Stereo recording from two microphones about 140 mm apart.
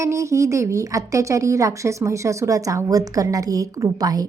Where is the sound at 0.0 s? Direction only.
20° right (ahead or behind).